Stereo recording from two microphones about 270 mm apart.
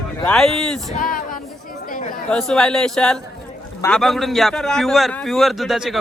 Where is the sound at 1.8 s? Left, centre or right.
Left.